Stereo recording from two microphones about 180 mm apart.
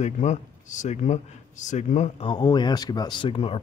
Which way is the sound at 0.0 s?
40° left (ahead or behind).